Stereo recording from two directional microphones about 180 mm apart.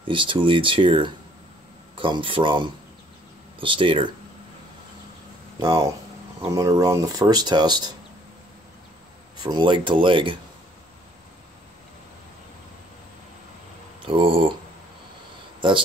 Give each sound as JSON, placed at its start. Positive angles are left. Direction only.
{"t": 0.0, "sound": "speech", "side_deg": -30}
{"t": 5.6, "sound": "speech", "side_deg": -20}
{"t": 9.4, "sound": "speech", "side_deg": -25}
{"t": 14.0, "sound": "speech", "side_deg": -30}